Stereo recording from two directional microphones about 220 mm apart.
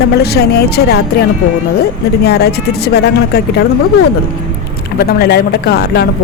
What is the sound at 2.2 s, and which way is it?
Speech, 45° left (ahead or behind).